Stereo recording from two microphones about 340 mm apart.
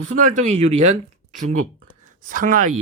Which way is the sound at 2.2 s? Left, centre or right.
Right.